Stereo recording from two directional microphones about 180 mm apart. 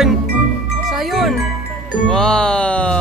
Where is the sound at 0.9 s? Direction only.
Centre (ahead or behind).